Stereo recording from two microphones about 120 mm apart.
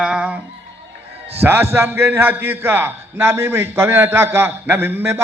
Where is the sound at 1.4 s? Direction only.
20° right (ahead or behind).